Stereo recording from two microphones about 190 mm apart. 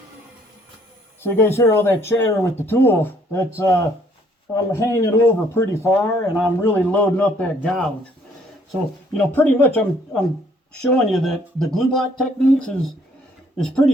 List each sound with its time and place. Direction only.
1.2 s speech: 10° left (ahead or behind)